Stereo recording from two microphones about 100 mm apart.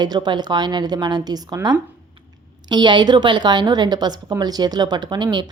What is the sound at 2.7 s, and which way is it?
Speech, 50° right (ahead or behind).